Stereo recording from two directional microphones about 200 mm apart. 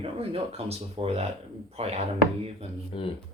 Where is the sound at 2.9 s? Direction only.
25° left (ahead or behind).